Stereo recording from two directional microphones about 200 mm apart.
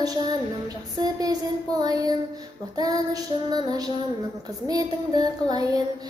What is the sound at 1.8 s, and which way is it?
Child singing, 20° right (ahead or behind).